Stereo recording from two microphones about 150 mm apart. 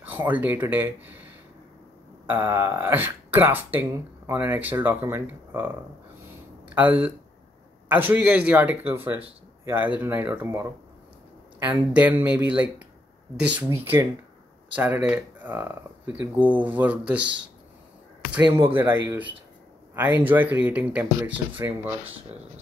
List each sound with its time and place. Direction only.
0.0 s speech: 10° right (ahead or behind)
2.2 s speech: 15° right (ahead or behind)
6.7 s speech: 10° right (ahead or behind)
18.4 s speech: 35° right (ahead or behind)
18.7 s speech: 15° right (ahead or behind)